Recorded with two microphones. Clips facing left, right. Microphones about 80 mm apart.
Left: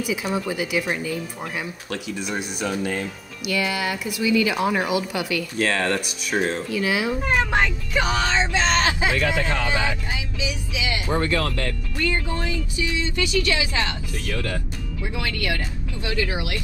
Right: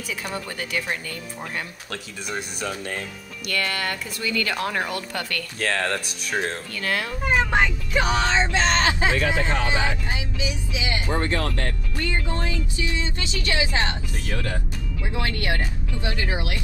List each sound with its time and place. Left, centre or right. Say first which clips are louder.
0.1 s speech: left 3 dB; centre
8.6 s speech: even; right